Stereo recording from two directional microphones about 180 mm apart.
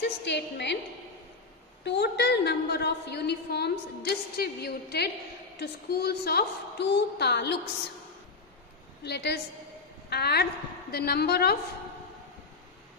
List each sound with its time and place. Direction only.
0.0 s a woman's voice: 70° left (ahead or behind)
1.9 s a woman's voice: 70° left (ahead or behind)
9.0 s a woman's voice: 70° left (ahead or behind)